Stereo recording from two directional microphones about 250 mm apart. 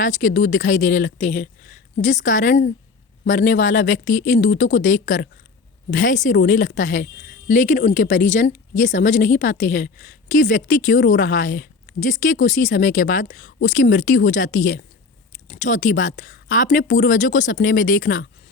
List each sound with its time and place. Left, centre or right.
0.0 s speech: left